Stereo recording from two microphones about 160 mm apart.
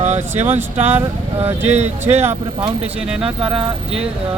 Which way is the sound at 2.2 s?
15° right (ahead or behind).